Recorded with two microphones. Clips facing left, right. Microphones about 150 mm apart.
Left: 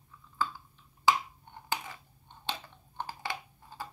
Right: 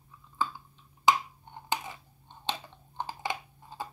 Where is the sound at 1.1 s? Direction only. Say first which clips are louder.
Right 2 dB; 15° right (ahead or behind).